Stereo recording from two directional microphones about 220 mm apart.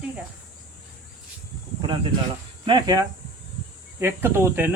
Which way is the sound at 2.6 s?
20° right (ahead or behind).